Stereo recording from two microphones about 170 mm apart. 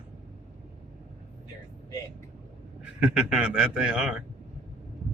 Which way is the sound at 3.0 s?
5° right (ahead or behind).